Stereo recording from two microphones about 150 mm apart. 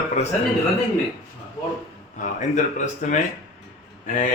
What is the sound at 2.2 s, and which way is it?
Speech, 55° left (ahead or behind).